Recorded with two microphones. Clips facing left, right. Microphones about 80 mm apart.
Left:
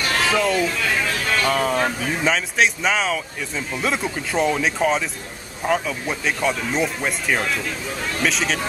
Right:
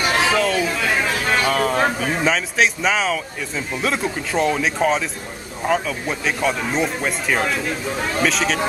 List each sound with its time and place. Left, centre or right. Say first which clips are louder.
0.2 s speech: left 2 dB; centre
0.7 s speech: right 2 dB; centre
1.5 s speech: right 2 dB; centre